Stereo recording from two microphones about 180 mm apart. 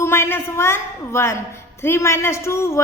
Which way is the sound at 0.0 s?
15° left (ahead or behind).